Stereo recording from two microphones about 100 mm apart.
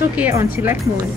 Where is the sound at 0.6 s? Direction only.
20° right (ahead or behind).